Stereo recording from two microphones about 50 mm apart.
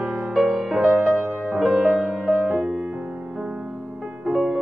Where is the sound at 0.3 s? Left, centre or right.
Centre.